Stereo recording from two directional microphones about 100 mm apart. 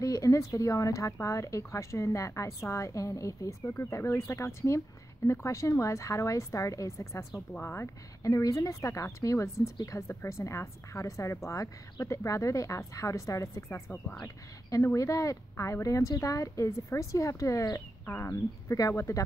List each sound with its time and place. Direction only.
0.0 s speech: 35° left (ahead or behind)
18.3 s speech: 35° left (ahead or behind)